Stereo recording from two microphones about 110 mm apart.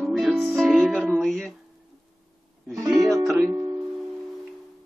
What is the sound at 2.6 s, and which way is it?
Music, centre (ahead or behind).